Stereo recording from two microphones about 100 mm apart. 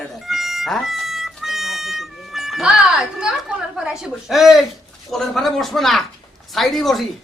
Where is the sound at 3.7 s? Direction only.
5° right (ahead or behind).